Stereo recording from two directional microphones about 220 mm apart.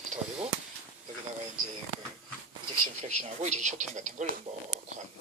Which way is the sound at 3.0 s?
30° right (ahead or behind).